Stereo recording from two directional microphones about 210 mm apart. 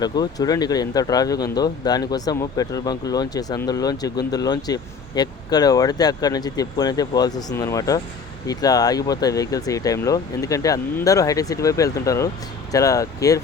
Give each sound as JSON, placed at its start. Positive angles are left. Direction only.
{"t": 0.0, "sound": "speech", "side_deg": 20}